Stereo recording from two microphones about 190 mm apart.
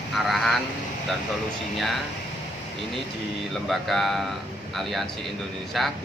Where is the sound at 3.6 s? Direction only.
Centre (ahead or behind).